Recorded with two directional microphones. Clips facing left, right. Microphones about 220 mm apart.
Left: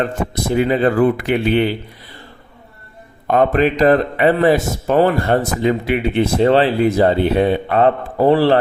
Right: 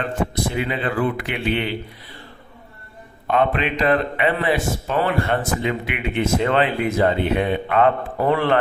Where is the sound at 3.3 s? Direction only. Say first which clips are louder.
Left 6 dB; 40° left (ahead or behind).